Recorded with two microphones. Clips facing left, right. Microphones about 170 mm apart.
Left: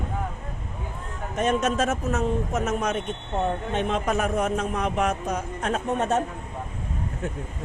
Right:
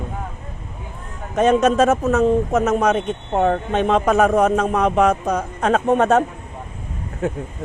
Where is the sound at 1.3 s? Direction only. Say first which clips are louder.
Right 9 dB; 90° right.